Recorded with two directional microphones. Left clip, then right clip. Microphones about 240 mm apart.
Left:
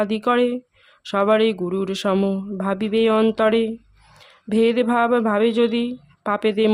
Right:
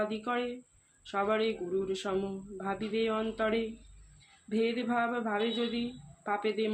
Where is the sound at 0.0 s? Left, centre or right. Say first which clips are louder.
Left 14 dB; left.